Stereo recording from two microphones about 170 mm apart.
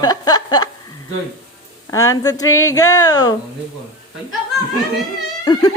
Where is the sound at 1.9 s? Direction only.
20° left (ahead or behind).